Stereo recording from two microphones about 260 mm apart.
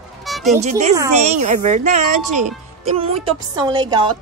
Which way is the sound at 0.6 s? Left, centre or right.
Right.